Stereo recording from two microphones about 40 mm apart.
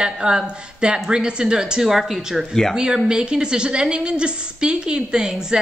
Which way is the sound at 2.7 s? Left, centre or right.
Centre.